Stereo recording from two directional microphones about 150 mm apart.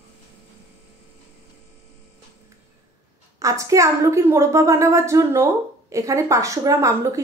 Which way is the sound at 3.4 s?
20° right (ahead or behind).